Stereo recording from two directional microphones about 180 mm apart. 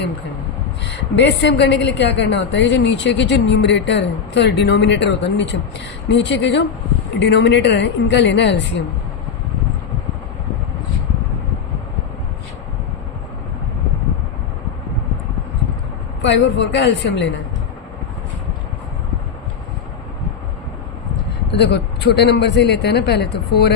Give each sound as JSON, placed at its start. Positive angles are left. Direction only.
{"t": 0.9, "sound": "a woman's voice", "side_deg": 80}
{"t": 16.2, "sound": "a woman's voice", "side_deg": 80}
{"t": 21.5, "sound": "a woman's voice", "side_deg": 70}